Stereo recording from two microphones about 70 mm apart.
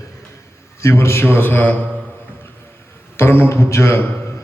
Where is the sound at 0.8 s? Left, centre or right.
Left.